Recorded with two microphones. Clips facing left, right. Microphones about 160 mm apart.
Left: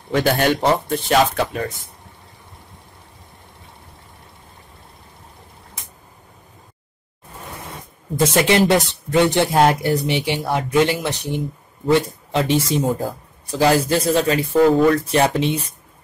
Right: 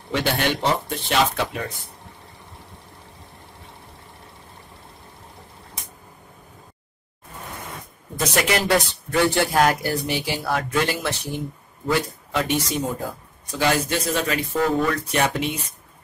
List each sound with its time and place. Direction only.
0.1 s speech: 45° left (ahead or behind)
8.2 s speech: 25° left (ahead or behind)
11.9 s speech: 30° left (ahead or behind)